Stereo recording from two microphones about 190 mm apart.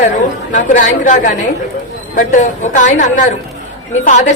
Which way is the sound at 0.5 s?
40° left (ahead or behind).